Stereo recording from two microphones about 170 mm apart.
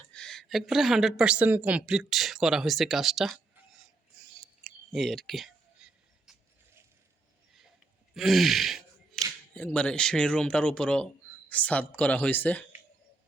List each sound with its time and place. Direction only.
0.0 s a woman's voice: 5° left (ahead or behind)
4.2 s a sound: centre (ahead or behind)
8.1 s speech: centre (ahead or behind)